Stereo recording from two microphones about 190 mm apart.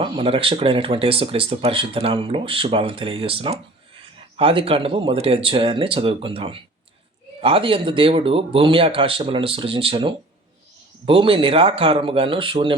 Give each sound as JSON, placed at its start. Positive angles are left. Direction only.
{"t": 0.0, "sound": "speech", "side_deg": -30}